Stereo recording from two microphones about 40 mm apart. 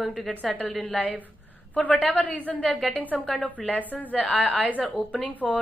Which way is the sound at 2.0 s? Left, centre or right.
Left.